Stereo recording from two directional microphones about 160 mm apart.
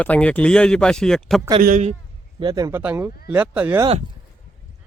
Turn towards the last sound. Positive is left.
turn(degrees=-10)  # may be behind; listen again after turning